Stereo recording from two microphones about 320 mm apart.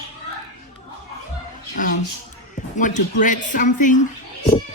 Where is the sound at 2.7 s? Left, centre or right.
Left.